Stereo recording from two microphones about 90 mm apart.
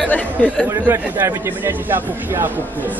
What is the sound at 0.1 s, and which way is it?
Speech, 20° left (ahead or behind).